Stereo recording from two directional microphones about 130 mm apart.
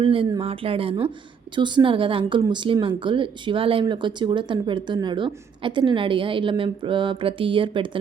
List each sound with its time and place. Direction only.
0.0 s speech: 40° right (ahead or behind)